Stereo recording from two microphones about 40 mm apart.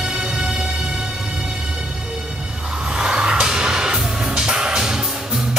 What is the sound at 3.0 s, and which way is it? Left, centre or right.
Music, centre.